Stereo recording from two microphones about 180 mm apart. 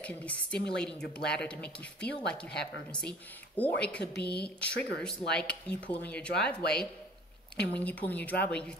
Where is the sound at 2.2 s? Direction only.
65° left (ahead or behind).